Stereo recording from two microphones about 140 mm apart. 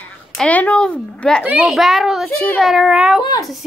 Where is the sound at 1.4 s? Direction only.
5° right (ahead or behind).